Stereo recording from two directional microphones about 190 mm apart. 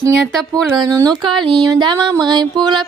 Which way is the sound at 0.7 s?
20° right (ahead or behind).